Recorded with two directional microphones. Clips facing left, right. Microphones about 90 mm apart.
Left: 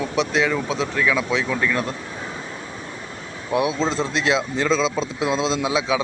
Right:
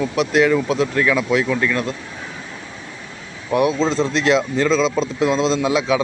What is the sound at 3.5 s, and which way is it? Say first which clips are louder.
Speech: right 4 dB; 20° left (ahead or behind).